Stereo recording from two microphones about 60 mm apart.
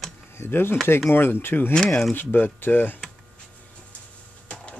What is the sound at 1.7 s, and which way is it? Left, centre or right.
Speech, centre.